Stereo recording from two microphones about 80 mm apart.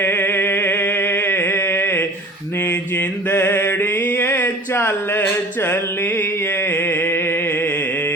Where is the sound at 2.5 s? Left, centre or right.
Left.